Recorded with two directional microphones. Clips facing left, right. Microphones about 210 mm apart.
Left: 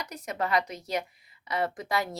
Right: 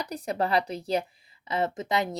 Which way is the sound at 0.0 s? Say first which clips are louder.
Right 4 dB; 35° right (ahead or behind).